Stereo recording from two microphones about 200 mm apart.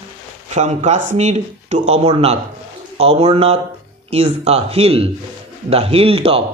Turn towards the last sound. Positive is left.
turn(degrees=-30)  # may be behind; listen again after turning